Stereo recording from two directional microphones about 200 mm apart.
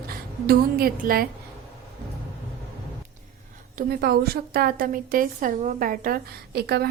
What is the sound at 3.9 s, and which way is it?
A woman's voice, 50° right (ahead or behind).